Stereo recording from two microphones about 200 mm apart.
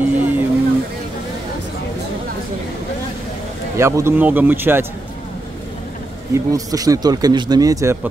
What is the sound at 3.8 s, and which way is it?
Speech, 15° right (ahead or behind).